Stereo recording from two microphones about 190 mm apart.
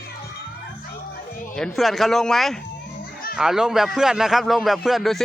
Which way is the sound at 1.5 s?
Centre (ahead or behind).